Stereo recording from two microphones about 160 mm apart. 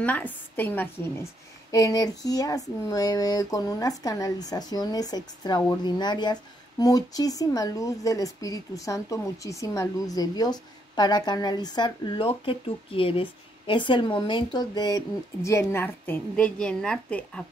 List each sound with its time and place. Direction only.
0.0 s a woman's voice: 10° left (ahead or behind)